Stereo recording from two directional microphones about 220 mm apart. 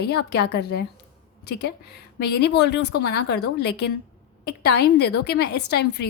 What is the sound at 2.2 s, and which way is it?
A woman's voice, 50° left (ahead or behind).